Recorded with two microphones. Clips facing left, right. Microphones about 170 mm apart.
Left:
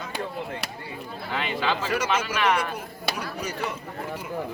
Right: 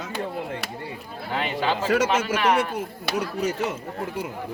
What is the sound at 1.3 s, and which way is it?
Speech, 40° right (ahead or behind).